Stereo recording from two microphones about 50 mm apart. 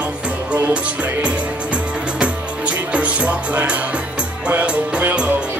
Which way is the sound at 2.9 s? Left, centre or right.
Right.